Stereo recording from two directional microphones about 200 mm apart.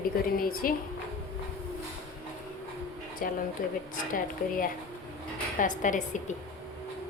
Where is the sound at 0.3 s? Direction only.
45° left (ahead or behind).